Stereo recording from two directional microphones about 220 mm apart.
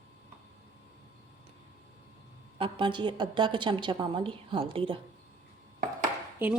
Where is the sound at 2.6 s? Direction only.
25° right (ahead or behind).